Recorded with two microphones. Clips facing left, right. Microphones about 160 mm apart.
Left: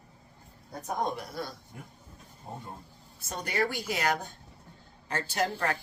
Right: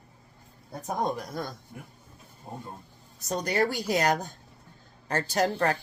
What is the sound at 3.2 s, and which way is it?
Speech, 40° right (ahead or behind).